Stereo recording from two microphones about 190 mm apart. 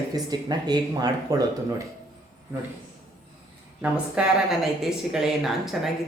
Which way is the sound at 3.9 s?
5° right (ahead or behind).